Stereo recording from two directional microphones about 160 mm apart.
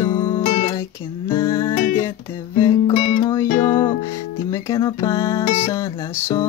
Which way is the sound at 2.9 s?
40° left (ahead or behind).